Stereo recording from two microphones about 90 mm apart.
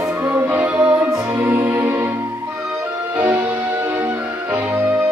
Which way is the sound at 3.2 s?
20° right (ahead or behind).